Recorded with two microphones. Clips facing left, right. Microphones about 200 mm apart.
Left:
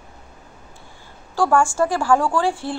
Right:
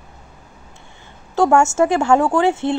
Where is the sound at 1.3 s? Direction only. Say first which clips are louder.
Right 4 dB; 25° right (ahead or behind).